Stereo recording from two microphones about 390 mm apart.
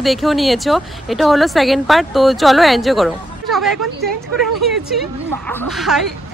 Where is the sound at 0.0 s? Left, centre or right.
Centre.